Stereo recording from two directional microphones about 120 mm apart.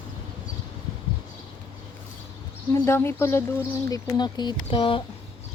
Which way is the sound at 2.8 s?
20° left (ahead or behind).